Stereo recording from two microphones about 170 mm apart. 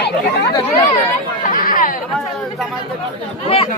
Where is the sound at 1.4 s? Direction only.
50° left (ahead or behind).